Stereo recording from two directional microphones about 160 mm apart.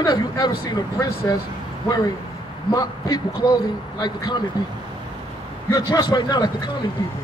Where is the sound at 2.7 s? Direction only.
25° left (ahead or behind).